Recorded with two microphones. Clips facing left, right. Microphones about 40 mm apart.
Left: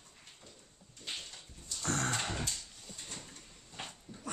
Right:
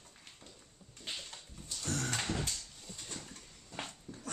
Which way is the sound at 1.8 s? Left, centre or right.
Left.